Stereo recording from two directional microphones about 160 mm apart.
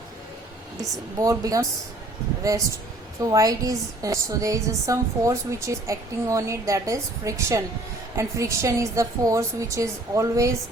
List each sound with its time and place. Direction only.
0.8 s a woman's voice: 20° right (ahead or behind)